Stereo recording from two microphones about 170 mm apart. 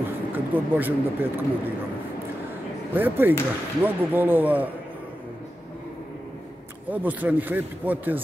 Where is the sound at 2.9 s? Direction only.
10° right (ahead or behind).